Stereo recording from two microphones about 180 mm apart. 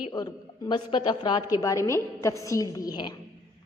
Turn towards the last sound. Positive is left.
turn(degrees=20)  # may be behind; listen again after turning